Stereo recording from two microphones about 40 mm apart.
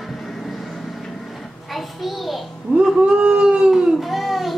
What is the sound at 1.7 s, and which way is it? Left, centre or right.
Speech, centre.